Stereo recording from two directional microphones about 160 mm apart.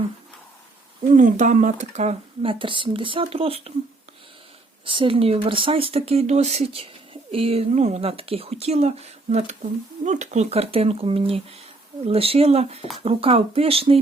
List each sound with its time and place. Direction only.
1.0 s speech: 50° right (ahead or behind)
4.9 s speech: 35° right (ahead or behind)